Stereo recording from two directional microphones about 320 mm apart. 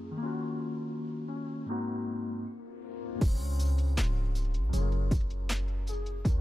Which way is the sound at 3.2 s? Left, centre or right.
Centre.